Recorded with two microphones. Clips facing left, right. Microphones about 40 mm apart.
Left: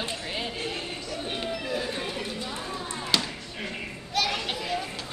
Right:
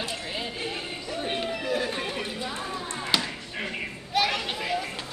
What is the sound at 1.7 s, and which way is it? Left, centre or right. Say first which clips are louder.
Music: right 4 dB; right.